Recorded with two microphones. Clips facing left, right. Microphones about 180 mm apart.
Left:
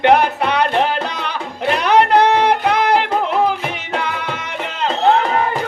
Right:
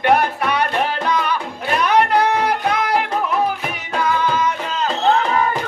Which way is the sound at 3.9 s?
65° left (ahead or behind).